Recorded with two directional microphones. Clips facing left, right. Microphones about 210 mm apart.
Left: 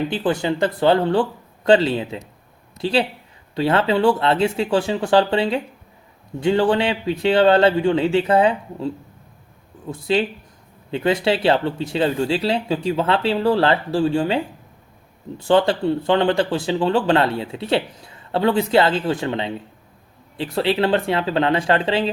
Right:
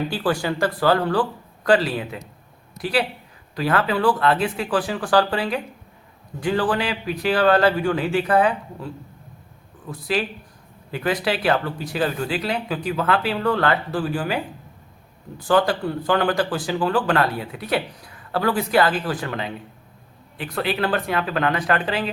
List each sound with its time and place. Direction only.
0.1 s speech: 20° left (ahead or behind)